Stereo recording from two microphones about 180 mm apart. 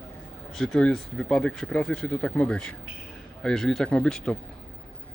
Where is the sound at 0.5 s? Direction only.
5° left (ahead or behind).